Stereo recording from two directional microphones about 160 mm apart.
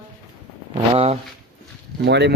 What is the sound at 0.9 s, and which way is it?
Speech, 40° right (ahead or behind).